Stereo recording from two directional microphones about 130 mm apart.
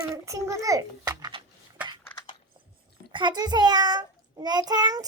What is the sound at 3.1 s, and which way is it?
A child's voice, 40° right (ahead or behind).